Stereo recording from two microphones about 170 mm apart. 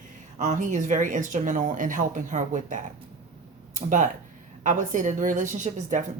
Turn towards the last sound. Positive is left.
turn(degrees=-45)  # may be behind; listen again after turning